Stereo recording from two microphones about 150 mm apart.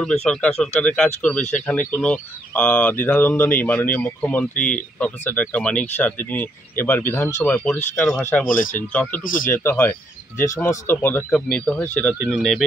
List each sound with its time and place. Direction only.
0.0 s speech: 5° left (ahead or behind)
9.2 s speech: 65° left (ahead or behind)
9.5 s speech: 15° left (ahead or behind)